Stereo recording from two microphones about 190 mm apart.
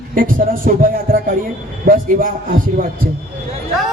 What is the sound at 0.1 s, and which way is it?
A man's voice, 50° right (ahead or behind).